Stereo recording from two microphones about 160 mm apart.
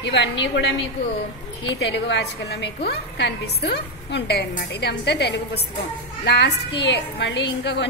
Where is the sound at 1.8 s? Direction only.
90° left.